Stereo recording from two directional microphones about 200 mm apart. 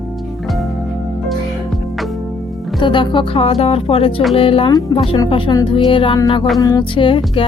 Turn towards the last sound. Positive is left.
turn(degrees=25)  # may be behind; listen again after turning